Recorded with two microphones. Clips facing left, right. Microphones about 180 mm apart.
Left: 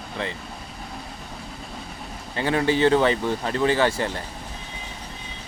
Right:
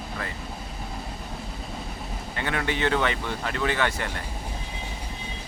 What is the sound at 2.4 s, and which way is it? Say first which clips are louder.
Speech: left 7 dB; 30° left (ahead or behind).